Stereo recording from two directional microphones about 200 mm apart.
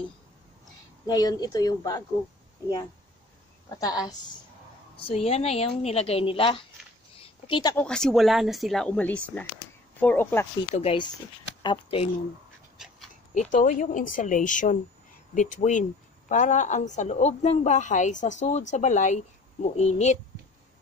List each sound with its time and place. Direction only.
1.0 s a woman's voice: 20° left (ahead or behind)
3.6 s a woman's voice: 15° left (ahead or behind)
4.9 s a woman's voice: 30° left (ahead or behind)
7.2 s a sound: 25° left (ahead or behind)
7.7 s speech: 5° left (ahead or behind)
10.8 s a woman's voice: 25° left (ahead or behind)
12.7 s dog: centre (ahead or behind)
13.3 s speech: 40° left (ahead or behind)